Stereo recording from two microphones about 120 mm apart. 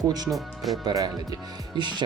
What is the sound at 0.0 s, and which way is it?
Speech, 35° right (ahead or behind).